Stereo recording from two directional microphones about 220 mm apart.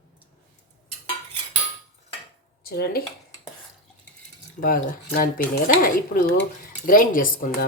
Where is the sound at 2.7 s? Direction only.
45° left (ahead or behind).